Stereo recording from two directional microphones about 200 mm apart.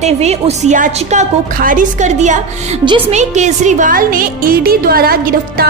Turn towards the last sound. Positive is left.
turn(degrees=-50)  # may be behind; listen again after turning